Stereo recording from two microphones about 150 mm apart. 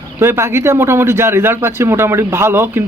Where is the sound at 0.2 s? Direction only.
15° right (ahead or behind).